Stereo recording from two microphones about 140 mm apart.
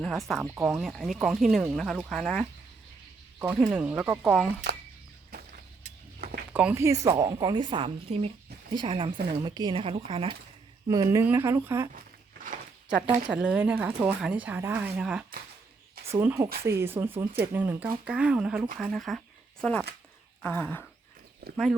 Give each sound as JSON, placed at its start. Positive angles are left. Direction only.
{"t": 0.0, "sound": "speech", "side_deg": 0}
{"t": 3.3, "sound": "speech", "side_deg": -10}
{"t": 6.1, "sound": "a sound", "side_deg": -90}
{"t": 6.5, "sound": "speech", "side_deg": -10}
{"t": 6.8, "sound": "speech", "side_deg": -20}
{"t": 8.7, "sound": "speech", "side_deg": -35}
{"t": 10.8, "sound": "speech", "side_deg": -25}
{"t": 13.2, "sound": "speech", "side_deg": -10}
{"t": 16.0, "sound": "speech", "side_deg": -20}
{"t": 21.4, "sound": "speech", "side_deg": -90}